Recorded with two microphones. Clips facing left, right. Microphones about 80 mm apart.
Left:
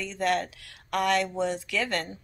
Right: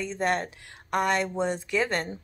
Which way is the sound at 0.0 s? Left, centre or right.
Right.